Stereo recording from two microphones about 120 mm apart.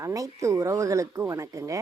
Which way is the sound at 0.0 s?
25° right (ahead or behind).